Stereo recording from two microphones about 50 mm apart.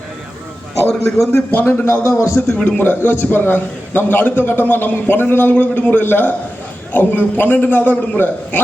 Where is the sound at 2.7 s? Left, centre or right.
Left.